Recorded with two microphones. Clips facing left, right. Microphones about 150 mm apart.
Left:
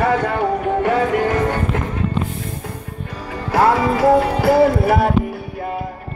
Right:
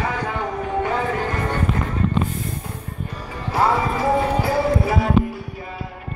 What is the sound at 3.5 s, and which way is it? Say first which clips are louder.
Music: left 5 dB; 85° left.